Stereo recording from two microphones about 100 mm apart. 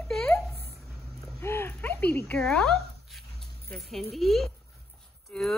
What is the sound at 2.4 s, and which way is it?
Speech, 5° left (ahead or behind).